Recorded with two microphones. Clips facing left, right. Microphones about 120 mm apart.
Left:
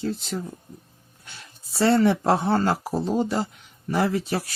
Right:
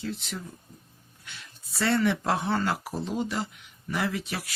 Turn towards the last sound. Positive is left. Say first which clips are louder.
# left 7 dB
turn(degrees=35)  # may be behind; listen again after turning